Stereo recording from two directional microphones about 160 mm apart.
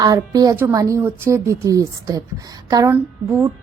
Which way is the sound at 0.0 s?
25° right (ahead or behind).